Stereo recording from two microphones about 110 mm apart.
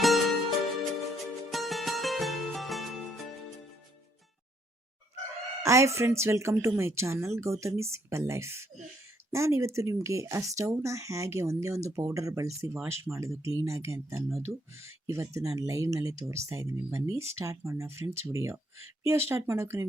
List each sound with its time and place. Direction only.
0.0 s music: centre (ahead or behind)
5.6 s speech: 25° right (ahead or behind)